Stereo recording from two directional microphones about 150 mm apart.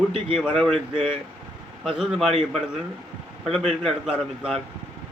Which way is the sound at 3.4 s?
Centre (ahead or behind).